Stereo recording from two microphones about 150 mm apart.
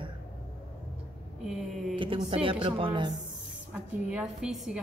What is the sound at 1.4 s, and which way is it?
Speech, centre (ahead or behind).